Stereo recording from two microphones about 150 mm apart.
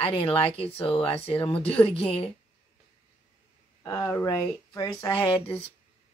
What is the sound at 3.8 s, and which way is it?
Speech, 20° left (ahead or behind).